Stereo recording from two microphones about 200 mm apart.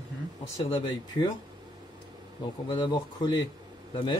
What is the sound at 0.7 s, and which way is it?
Speech, 25° left (ahead or behind).